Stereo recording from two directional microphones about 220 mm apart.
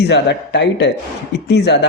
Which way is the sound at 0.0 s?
50° left (ahead or behind).